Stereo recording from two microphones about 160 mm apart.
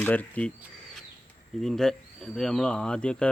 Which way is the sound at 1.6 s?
Centre (ahead or behind).